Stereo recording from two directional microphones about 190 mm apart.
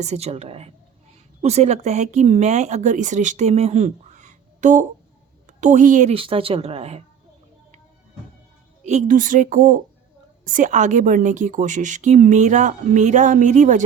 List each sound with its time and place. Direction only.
0.0 s a woman's voice: 35° right (ahead or behind)
6.1 s speech: 30° right (ahead or behind)
8.8 s a woman's voice: 35° right (ahead or behind)